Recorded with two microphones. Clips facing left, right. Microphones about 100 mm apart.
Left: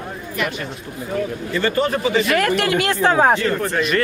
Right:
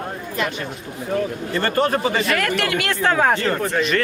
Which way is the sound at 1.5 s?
50° right (ahead or behind).